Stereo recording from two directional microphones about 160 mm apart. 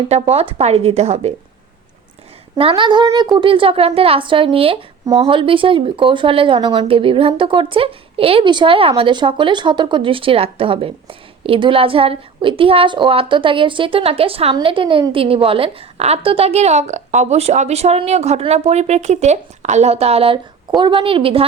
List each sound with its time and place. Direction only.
0.1 s speech: 40° right (ahead or behind)
2.6 s speech: 35° right (ahead or behind)